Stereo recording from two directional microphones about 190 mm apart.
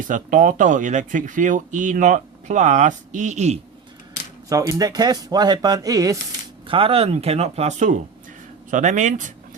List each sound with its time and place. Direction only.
0.1 s speech: 40° right (ahead or behind)
4.4 s speech: 15° right (ahead or behind)
6.7 s speech: 30° right (ahead or behind)